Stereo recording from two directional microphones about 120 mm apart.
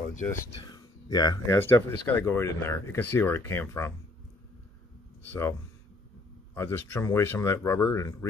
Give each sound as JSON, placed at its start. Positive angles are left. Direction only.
{"t": 0.7, "sound": "a sound", "side_deg": 35}
{"t": 1.7, "sound": "speech", "side_deg": 20}
{"t": 5.3, "sound": "speech", "side_deg": 20}